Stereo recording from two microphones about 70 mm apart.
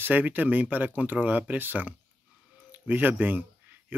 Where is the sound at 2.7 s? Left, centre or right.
Right.